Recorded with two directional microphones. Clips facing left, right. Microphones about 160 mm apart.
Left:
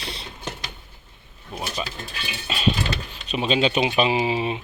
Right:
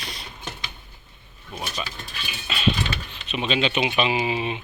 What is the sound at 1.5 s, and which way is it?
Speech, 10° left (ahead or behind).